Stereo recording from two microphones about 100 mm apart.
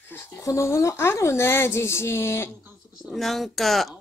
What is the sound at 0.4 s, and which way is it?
Speech, 30° left (ahead or behind).